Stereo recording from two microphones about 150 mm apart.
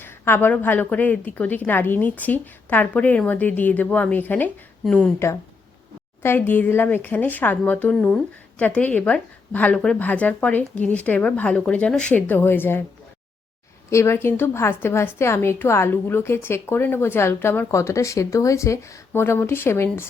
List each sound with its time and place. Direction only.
0.0 s a woman's voice: 15° left (ahead or behind)
6.2 s a woman's voice: 15° left (ahead or behind)
13.9 s a woman's voice: 15° left (ahead or behind)